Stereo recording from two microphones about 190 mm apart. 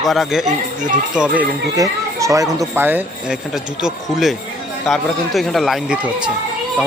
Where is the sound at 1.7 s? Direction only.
15° right (ahead or behind).